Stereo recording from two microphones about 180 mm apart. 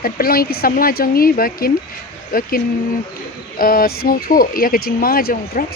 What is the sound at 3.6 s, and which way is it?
Speech, 55° left (ahead or behind).